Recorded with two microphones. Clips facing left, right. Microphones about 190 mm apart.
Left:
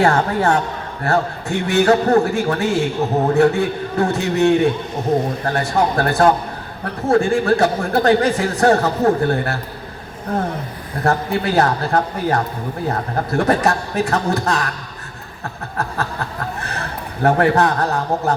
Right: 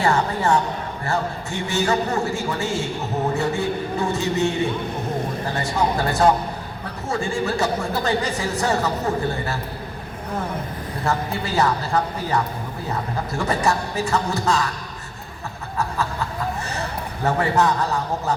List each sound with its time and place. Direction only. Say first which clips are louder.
0.0 s speech: left 5 dB; 60° left (ahead or behind)
5.5 s speech: left 4 dB; 65° left (ahead or behind)
11.0 s speech: left 6 dB; 60° left (ahead or behind)
17.2 s speech: left 5 dB; 60° left (ahead or behind)